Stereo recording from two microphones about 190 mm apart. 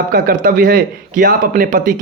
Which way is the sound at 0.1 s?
45° right (ahead or behind).